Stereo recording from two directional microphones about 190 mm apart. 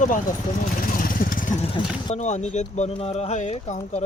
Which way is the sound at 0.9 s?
45° left (ahead or behind).